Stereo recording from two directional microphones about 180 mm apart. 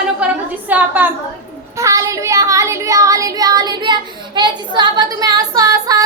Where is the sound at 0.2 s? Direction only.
5° right (ahead or behind).